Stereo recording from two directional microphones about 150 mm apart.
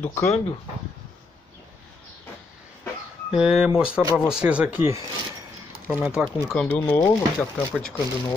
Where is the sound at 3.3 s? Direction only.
5° right (ahead or behind).